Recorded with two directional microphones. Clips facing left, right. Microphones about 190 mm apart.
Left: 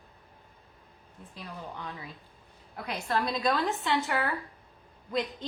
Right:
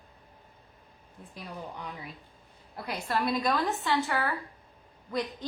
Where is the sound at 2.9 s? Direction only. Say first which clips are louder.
Right 1 dB; 10° right (ahead or behind).